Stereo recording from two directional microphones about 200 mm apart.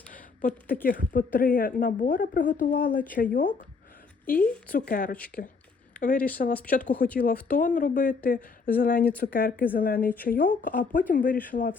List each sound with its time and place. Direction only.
0.1 s a woman's voice: 45° left (ahead or behind)
4.4 s speech: 5° left (ahead or behind)
4.7 s a woman's voice: 45° left (ahead or behind)
5.1 s speech: 5° left (ahead or behind)
6.0 s a woman's voice: 40° left (ahead or behind)
10.0 s speech: 10° left (ahead or behind)
10.2 s a woman's voice: 45° left (ahead or behind)